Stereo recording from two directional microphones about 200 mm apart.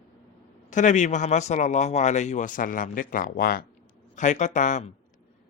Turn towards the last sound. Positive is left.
turn(degrees=40)  # may be behind; listen again after turning